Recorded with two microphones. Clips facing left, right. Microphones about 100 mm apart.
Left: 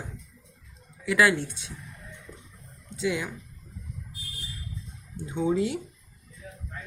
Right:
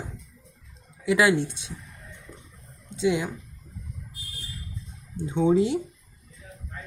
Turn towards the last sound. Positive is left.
turn(degrees=-25)  # may be behind; listen again after turning